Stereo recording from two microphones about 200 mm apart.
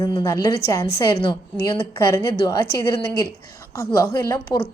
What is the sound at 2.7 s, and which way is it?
Speech, 50° left (ahead or behind).